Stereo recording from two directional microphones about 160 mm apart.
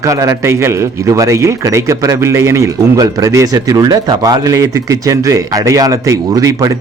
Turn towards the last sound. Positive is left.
turn(degrees=-20)  # may be behind; listen again after turning